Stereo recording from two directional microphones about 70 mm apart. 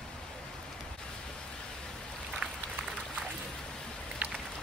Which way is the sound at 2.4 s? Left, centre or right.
Centre.